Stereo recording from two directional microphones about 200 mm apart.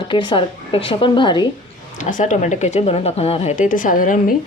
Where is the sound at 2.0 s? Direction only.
40° left (ahead or behind).